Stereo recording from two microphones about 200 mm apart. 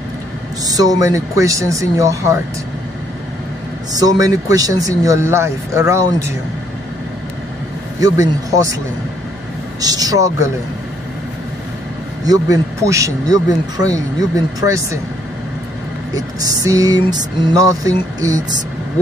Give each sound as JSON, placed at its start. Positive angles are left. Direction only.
{"t": 0.7, "sound": "speech", "side_deg": -20}
{"t": 3.9, "sound": "speech", "side_deg": -20}
{"t": 8.0, "sound": "speech", "side_deg": -15}
{"t": 9.8, "sound": "speech", "side_deg": -20}
{"t": 12.3, "sound": "speech", "side_deg": -15}
{"t": 16.2, "sound": "speech", "side_deg": -15}